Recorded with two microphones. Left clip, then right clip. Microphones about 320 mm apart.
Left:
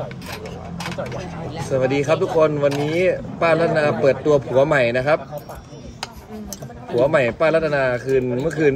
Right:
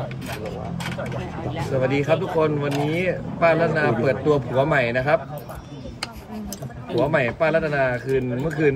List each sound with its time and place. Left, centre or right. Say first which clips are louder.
1.7 s speech: left 3 dB; left
7.0 s speech: left 4 dB; left